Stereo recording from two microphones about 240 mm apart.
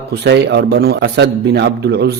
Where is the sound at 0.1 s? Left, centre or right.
Right.